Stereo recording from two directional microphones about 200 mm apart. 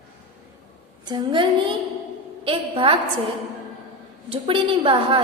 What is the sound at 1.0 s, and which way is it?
A woman's voice, 25° right (ahead or behind).